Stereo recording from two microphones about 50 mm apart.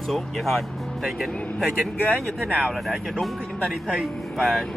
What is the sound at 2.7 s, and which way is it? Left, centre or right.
Speech, centre.